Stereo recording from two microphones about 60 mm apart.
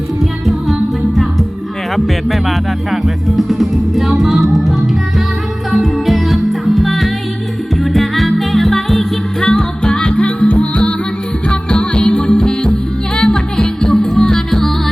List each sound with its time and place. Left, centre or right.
0.4 s music: centre